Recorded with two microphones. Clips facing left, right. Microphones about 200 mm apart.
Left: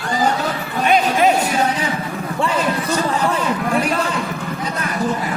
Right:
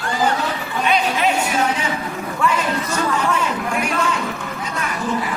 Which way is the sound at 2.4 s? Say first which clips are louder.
Left 1 dB; 35° left (ahead or behind).